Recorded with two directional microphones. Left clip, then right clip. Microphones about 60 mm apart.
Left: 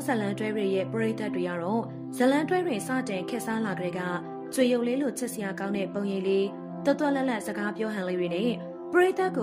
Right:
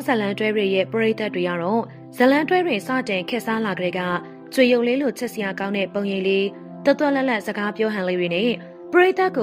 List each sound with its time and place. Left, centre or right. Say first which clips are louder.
0.0 s a woman's voice: right 7 dB; right
0.3 s a woman's voice: right 8 dB; right
2.4 s a woman's voice: right 7 dB; right